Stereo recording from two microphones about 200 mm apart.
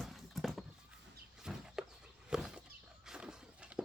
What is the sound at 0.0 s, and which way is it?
Horse, centre (ahead or behind).